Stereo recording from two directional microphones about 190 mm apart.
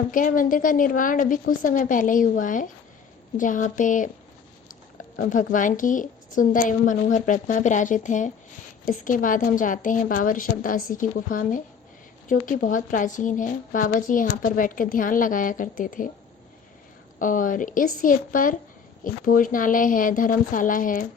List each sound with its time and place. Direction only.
0.1 s a woman's voice: 45° left (ahead or behind)
5.1 s a woman's voice: 45° left (ahead or behind)
17.2 s a woman's voice: 45° left (ahead or behind)